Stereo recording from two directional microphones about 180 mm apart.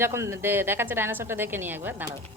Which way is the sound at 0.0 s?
15° right (ahead or behind).